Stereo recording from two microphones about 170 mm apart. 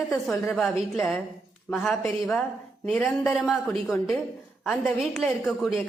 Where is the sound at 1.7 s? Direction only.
Centre (ahead or behind).